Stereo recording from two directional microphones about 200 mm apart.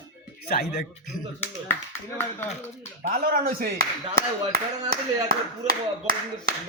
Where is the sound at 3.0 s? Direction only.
50° right (ahead or behind).